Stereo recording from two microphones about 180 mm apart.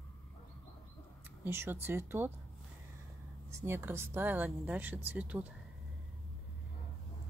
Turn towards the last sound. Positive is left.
turn(degrees=-5)  # may be behind; listen again after turning